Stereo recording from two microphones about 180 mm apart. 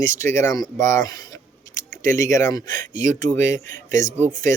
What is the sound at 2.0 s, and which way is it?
Speech, 15° left (ahead or behind).